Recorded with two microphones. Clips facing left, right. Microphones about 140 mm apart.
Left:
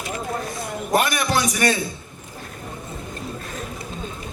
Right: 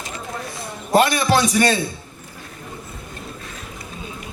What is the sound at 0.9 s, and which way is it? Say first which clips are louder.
Speech: right 5 dB; 25° right (ahead or behind).